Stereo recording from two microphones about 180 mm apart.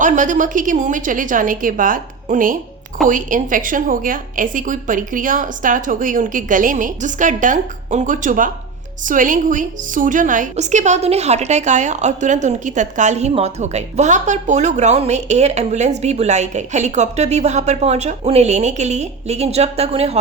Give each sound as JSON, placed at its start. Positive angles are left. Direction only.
{"t": 0.0, "sound": "a woman's voice", "side_deg": -45}